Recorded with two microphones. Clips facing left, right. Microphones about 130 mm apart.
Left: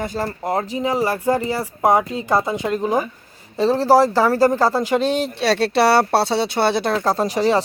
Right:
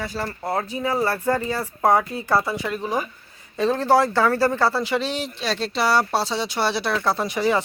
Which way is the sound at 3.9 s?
35° left (ahead or behind).